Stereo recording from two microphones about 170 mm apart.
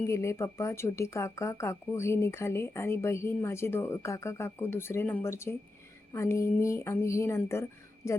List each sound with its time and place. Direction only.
0.1 s speech: 15° left (ahead or behind)